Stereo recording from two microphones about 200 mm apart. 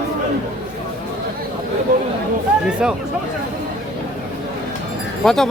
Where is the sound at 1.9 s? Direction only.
40° right (ahead or behind).